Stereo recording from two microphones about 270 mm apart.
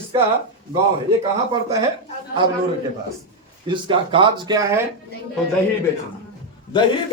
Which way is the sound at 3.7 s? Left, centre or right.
Centre.